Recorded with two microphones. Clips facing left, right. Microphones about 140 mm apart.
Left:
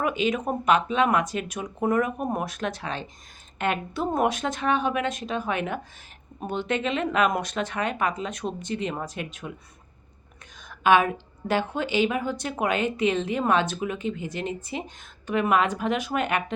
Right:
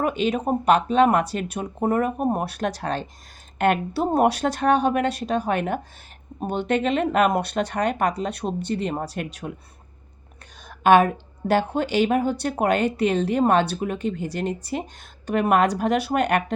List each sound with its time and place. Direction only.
0.0 s speech: 35° right (ahead or behind)
10.5 s a sound: 35° right (ahead or behind)
11.7 s speech: 40° right (ahead or behind)